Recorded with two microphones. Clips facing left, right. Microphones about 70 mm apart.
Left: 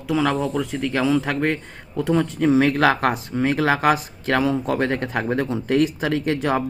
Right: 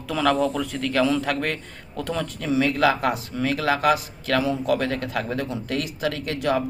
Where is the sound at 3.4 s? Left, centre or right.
Left.